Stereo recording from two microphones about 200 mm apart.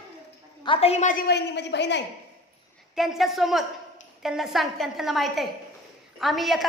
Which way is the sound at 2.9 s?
Centre (ahead or behind).